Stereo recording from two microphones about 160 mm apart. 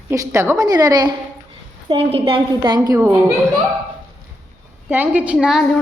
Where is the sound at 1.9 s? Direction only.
35° right (ahead or behind); by 3.1 s 20° right (ahead or behind).